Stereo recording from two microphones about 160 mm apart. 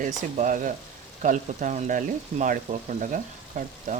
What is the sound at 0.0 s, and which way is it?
Speech, 55° right (ahead or behind).